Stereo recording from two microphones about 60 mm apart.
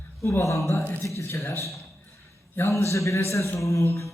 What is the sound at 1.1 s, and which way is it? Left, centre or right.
A man's voice, left.